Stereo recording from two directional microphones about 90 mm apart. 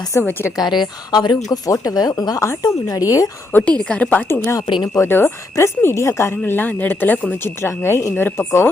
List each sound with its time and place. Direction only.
0.1 s speech: 25° left (ahead or behind)
0.5 s a woman's voice: 55° left (ahead or behind)
1.5 s speech: 40° left (ahead or behind)
3.5 s a woman's voice: 15° left (ahead or behind)
4.6 s speech: 65° left (ahead or behind)
4.9 s speech: 25° left (ahead or behind)